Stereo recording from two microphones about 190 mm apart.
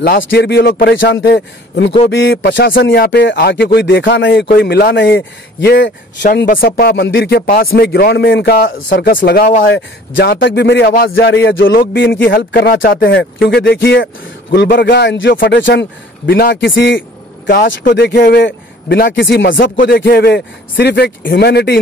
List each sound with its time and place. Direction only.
0.0 s a man's voice: 50° left (ahead or behind); by 8.8 s 75° left (ahead or behind)
8.9 s speech: 50° left (ahead or behind)
10.1 s a man's voice: 65° left (ahead or behind)
11.6 s a man's voice: 50° left (ahead or behind)
13.0 s a man's voice: 70° left (ahead or behind)
17.8 s a man's voice: 55° left (ahead or behind)
20.1 s a man's voice: 55° left (ahead or behind)